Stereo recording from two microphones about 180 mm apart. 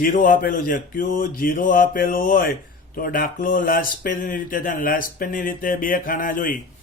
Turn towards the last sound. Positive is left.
turn(degrees=50)  # may be behind; listen again after turning